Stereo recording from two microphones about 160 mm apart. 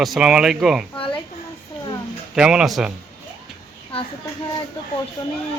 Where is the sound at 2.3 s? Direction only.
5° right (ahead or behind).